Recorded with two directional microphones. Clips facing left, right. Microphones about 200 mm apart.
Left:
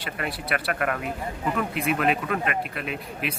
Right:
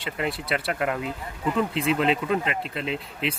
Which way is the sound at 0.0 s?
25° right (ahead or behind).